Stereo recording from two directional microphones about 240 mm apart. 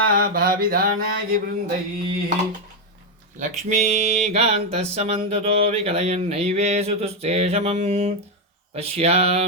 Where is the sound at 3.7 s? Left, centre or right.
Right.